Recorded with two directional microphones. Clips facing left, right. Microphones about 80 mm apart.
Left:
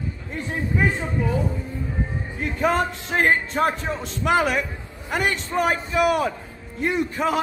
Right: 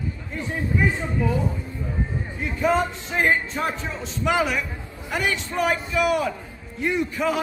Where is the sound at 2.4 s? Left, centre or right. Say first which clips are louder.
Even; left.